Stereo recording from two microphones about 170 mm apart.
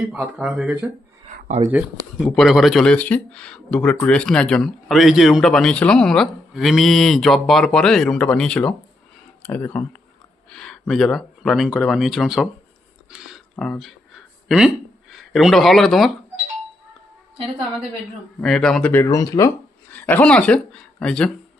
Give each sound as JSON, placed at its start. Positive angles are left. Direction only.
{"t": 0.1, "sound": "speech", "side_deg": -5}
{"t": 1.5, "sound": "speech", "side_deg": -40}
{"t": 2.2, "sound": "speech", "side_deg": 0}
{"t": 13.1, "sound": "a sound", "side_deg": -5}
{"t": 14.4, "sound": "speech", "side_deg": -5}
{"t": 18.3, "sound": "speech", "side_deg": 5}
{"t": 19.0, "sound": "speech", "side_deg": 20}
{"t": 19.9, "sound": "speech", "side_deg": 10}